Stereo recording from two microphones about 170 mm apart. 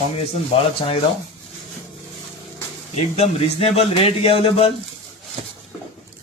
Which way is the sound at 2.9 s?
35° left (ahead or behind).